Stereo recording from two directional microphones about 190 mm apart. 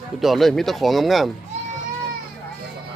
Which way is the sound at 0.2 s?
Centre (ahead or behind).